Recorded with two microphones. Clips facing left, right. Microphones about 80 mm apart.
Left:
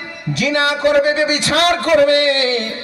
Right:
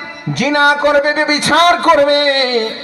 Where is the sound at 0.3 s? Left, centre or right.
Right.